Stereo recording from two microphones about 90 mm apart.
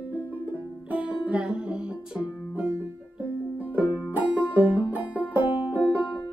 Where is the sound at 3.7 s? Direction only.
20° right (ahead or behind).